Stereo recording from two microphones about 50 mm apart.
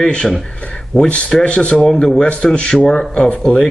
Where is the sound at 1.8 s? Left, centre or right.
Centre.